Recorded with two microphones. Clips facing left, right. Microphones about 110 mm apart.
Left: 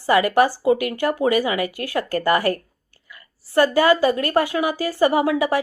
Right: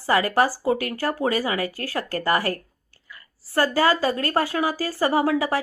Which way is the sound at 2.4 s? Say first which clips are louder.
Left 4 dB; 25° left (ahead or behind).